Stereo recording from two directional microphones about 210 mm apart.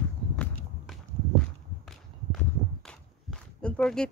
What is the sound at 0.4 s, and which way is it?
Walk, 5° left (ahead or behind).